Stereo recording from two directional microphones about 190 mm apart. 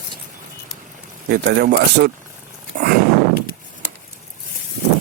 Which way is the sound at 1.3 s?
60° right (ahead or behind).